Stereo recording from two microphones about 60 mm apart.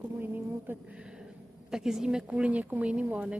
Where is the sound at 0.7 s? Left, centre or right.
Right.